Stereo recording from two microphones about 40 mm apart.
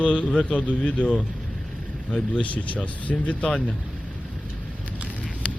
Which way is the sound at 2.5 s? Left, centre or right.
Left.